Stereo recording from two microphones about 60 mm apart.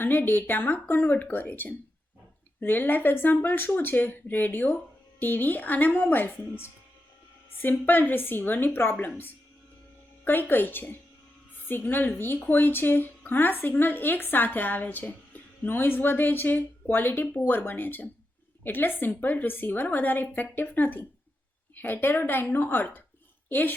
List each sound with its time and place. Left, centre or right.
0.0 s a woman's voice: left